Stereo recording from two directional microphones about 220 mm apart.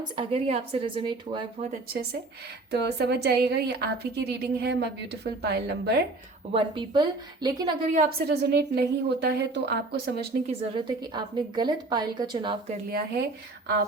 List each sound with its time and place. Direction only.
0.2 s a woman's voice: 25° right (ahead or behind)
2.7 s a woman's voice: 50° right (ahead or behind)
6.5 s a woman's voice: 20° right (ahead or behind)
7.9 s a woman's voice: 45° right (ahead or behind)
10.4 s a woman's voice: 25° right (ahead or behind)
12.9 s a woman's voice: 45° right (ahead or behind)